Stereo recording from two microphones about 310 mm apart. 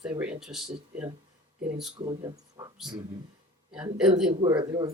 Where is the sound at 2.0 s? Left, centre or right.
Centre.